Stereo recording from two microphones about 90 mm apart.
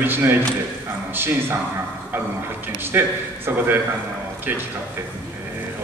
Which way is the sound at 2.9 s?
20° right (ahead or behind).